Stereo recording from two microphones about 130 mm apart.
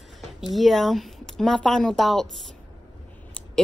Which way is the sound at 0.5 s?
Centre (ahead or behind).